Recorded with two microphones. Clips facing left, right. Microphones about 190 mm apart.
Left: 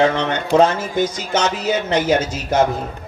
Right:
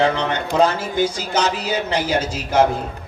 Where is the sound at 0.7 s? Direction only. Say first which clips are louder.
Left 1 dB; 30° right (ahead or behind).